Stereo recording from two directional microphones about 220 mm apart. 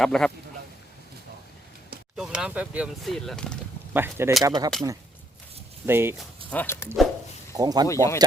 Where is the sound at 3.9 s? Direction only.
10° right (ahead or behind).